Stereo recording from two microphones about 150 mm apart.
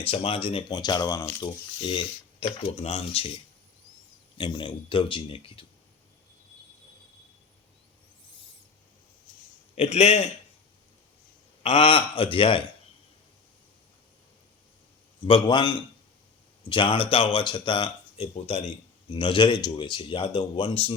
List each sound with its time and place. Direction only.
0.0 s speech: 40° left (ahead or behind); by 1.5 s 20° left (ahead or behind)
1.8 s speech: 35° left (ahead or behind)
4.4 s speech: 30° left (ahead or behind)
9.7 s a man's voice: 45° left (ahead or behind)
11.6 s speech: 40° left (ahead or behind)
15.2 s speech: 35° left (ahead or behind)